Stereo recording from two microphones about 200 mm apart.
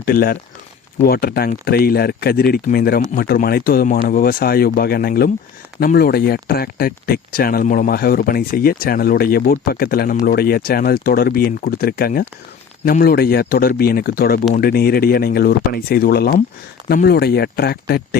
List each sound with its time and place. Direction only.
0.0 s speech: 50° left (ahead or behind)